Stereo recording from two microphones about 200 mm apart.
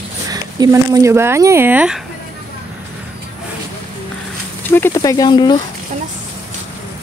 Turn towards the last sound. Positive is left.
turn(degrees=20)  # may be behind; listen again after turning